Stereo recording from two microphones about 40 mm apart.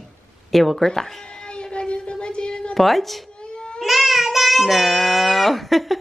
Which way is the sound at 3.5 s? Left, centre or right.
Left.